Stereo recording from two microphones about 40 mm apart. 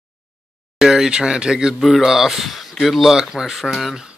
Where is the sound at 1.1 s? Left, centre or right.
Centre.